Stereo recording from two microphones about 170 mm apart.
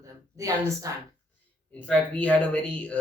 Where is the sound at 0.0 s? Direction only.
20° right (ahead or behind).